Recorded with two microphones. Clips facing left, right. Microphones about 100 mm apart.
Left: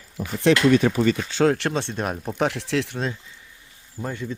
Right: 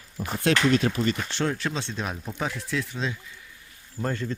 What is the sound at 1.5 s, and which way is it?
Speech, 70° left (ahead or behind).